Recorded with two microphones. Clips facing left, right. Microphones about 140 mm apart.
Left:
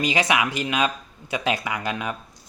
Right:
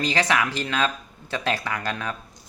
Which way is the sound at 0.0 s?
15° left (ahead or behind).